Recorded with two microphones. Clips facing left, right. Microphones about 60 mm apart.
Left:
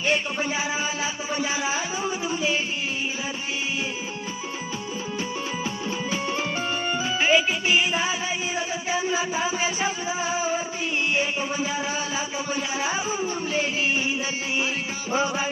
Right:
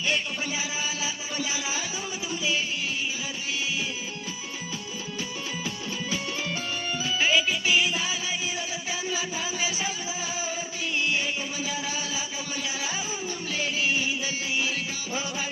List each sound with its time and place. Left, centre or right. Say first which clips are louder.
0.1 s music: left 5 dB; left
5.6 s music: left 4 dB; left